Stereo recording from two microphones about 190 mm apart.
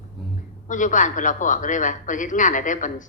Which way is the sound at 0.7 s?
40° left (ahead or behind).